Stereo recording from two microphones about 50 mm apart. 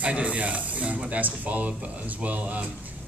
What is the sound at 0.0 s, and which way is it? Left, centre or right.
Speech, right.